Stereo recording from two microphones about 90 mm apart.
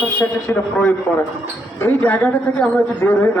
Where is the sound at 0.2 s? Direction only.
20° left (ahead or behind).